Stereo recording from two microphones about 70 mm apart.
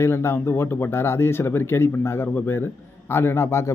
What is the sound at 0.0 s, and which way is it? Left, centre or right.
Speech, left.